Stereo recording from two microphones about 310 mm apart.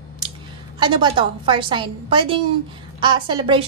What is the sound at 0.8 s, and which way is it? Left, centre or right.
A woman's voice, centre.